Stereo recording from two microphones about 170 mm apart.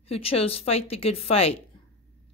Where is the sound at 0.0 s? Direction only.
35° left (ahead or behind).